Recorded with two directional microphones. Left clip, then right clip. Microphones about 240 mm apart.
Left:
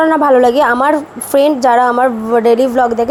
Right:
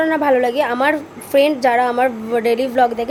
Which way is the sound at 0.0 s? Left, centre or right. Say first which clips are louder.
Left 6 dB; centre.